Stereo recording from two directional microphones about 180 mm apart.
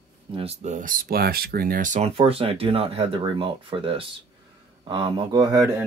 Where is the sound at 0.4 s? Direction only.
40° right (ahead or behind).